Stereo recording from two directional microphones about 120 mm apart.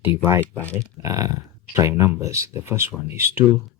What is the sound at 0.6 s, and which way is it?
Speech, 10° left (ahead or behind).